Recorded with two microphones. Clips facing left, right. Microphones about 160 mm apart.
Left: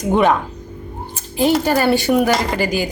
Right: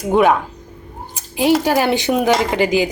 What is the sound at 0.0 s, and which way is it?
Speech, 5° right (ahead or behind).